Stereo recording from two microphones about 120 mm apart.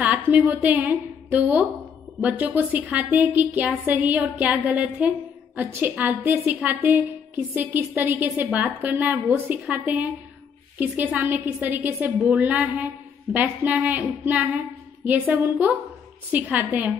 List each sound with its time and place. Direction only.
0.0 s a woman's voice: 15° right (ahead or behind)